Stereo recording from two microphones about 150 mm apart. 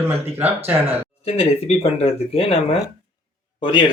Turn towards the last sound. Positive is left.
turn(degrees=30)  # may be behind; listen again after turning